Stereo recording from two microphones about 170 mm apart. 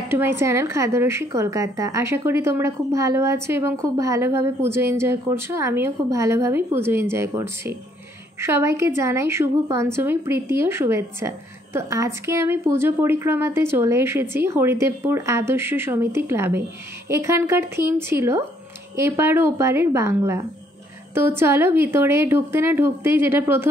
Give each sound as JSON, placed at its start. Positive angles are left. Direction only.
{"t": 0.1, "sound": "a woman's voice", "side_deg": -15}